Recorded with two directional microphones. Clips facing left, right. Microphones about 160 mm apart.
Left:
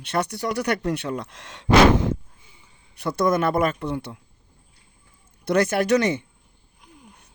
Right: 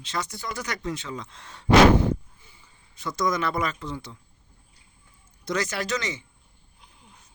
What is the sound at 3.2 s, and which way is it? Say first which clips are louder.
Speech: left 6 dB; 55° left (ahead or behind).